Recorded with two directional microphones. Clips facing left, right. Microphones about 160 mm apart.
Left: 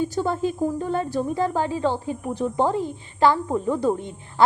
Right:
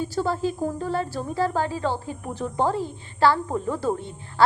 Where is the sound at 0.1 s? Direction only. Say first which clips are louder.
Left 1 dB; 20° left (ahead or behind).